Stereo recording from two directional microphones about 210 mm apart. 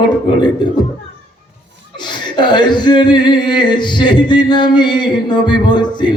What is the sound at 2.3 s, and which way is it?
A man's voice, 20° left (ahead or behind).